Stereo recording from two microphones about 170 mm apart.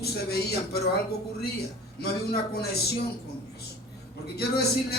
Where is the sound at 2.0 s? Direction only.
70° left (ahead or behind).